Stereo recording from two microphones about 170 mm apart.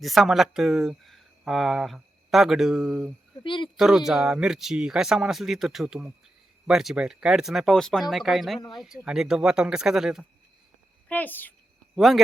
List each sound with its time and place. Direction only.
0.0 s speech: centre (ahead or behind)
3.4 s speech: 30° left (ahead or behind)
3.8 s speech: 5° right (ahead or behind)
11.1 s a woman's voice: 10° left (ahead or behind)
11.9 s speech: centre (ahead or behind)